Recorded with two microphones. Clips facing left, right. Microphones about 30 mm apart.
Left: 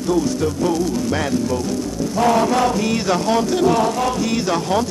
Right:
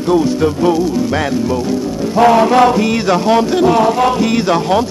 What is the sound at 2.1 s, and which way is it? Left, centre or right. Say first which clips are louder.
Chant: right 7 dB; right.